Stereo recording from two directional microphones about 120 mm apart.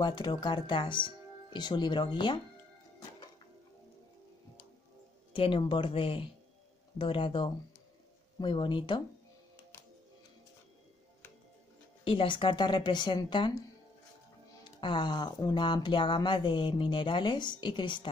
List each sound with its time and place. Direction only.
0.0 s speech: 40° left (ahead or behind)
5.3 s speech: 45° left (ahead or behind)
12.0 s speech: 45° left (ahead or behind)
14.8 s speech: 40° left (ahead or behind)